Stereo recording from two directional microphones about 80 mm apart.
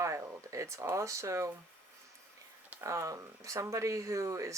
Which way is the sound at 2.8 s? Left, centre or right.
Right.